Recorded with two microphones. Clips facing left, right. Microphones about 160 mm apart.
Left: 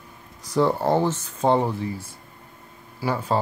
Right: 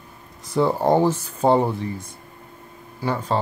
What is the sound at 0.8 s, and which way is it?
Speech, 15° right (ahead or behind).